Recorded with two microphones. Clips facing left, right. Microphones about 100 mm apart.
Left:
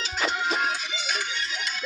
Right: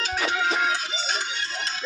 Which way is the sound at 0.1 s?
80° right.